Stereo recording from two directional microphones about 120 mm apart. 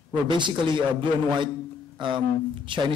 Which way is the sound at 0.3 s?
40° right (ahead or behind).